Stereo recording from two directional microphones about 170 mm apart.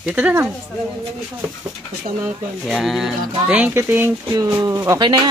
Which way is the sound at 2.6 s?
Centre (ahead or behind).